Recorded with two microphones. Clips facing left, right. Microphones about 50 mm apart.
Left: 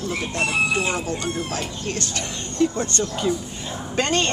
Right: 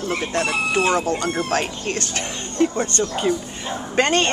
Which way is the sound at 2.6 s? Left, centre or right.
Right.